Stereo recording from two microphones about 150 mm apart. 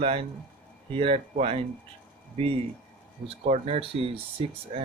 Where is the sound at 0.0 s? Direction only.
40° right (ahead or behind).